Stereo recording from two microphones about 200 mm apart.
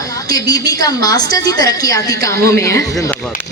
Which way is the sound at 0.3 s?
20° left (ahead or behind).